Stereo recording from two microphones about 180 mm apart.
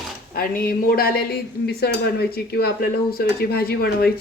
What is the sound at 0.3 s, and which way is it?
Speech, 55° left (ahead or behind).